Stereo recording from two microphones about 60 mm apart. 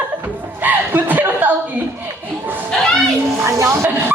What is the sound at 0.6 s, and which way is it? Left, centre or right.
Chuckle, right.